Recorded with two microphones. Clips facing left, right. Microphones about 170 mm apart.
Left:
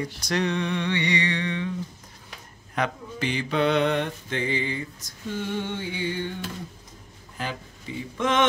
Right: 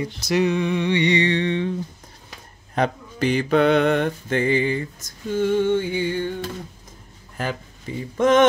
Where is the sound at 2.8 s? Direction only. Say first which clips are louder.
Right 5 dB; 45° right (ahead or behind).